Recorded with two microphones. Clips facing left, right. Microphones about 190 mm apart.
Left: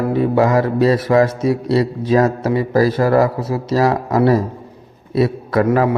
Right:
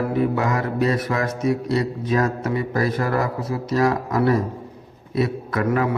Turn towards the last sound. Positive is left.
turn(degrees=30)  # may be behind; listen again after turning